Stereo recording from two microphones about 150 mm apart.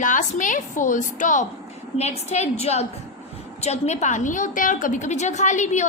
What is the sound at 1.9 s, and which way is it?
A woman's voice, 45° left (ahead or behind).